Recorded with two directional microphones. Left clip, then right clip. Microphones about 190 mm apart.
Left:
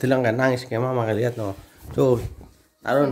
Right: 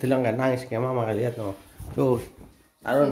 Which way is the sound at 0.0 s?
25° left (ahead or behind).